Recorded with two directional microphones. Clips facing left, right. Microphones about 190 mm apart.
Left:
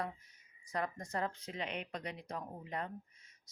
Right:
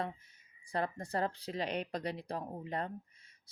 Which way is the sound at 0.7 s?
30° right (ahead or behind).